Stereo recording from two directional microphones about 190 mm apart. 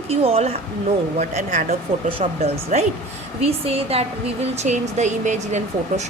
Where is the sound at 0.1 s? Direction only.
30° right (ahead or behind).